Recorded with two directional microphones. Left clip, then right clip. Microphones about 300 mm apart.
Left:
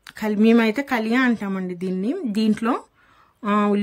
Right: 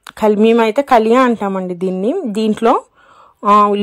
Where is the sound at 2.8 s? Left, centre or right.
Right.